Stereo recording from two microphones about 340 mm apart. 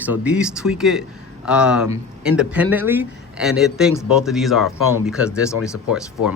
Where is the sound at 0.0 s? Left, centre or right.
Centre.